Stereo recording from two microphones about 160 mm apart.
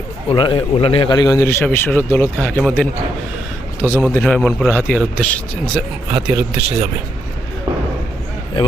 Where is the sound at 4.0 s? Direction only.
5° left (ahead or behind).